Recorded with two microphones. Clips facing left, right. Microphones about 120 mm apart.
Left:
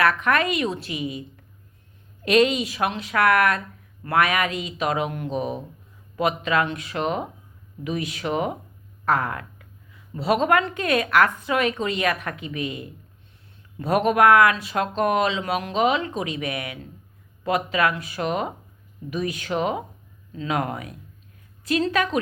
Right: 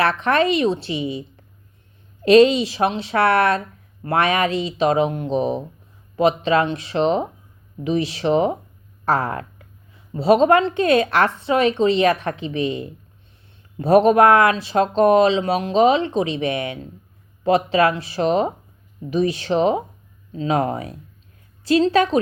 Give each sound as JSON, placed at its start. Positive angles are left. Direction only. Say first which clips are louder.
{"t": 0.0, "sound": "a woman's voice", "louder": "right 3 dB", "side_deg": -30}
{"t": 2.2, "sound": "a woman's voice", "louder": "right 7 dB", "side_deg": -30}